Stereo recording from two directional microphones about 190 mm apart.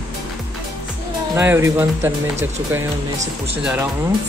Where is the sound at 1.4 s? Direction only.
15° right (ahead or behind).